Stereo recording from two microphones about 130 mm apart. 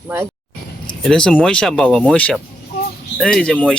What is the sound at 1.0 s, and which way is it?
Speech, 5° left (ahead or behind).